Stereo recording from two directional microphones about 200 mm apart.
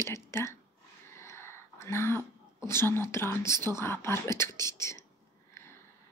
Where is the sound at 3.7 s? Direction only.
10° left (ahead or behind).